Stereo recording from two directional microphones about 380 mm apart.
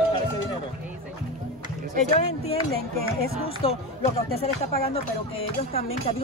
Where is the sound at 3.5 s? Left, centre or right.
Centre.